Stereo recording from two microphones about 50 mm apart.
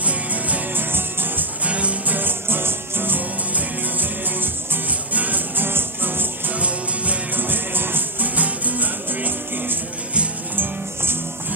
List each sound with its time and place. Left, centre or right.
0.0 s music: right
0.9 s music: right
1.6 s music: right
2.1 s music: right
5.7 s music: right
6.5 s music: right
7.3 s music: right
8.4 s music: right